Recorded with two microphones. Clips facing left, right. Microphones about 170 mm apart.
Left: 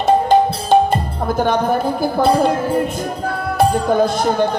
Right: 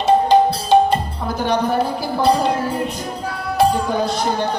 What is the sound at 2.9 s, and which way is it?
Music, 50° left (ahead or behind).